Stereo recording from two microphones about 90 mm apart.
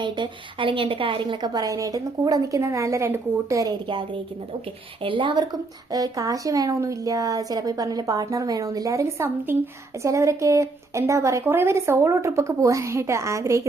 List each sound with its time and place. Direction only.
0.0 s a woman's voice: 60° right (ahead or behind)
1.5 s a woman's voice: 40° right (ahead or behind)
5.0 s a woman's voice: 65° right (ahead or behind); by 13.6 s 35° right (ahead or behind)